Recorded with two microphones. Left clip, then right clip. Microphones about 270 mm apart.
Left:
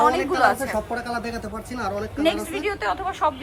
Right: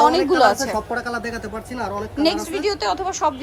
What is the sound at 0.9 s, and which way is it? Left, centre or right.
Speech, centre.